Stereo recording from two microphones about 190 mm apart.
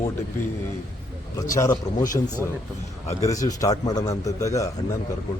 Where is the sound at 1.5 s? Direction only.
20° left (ahead or behind).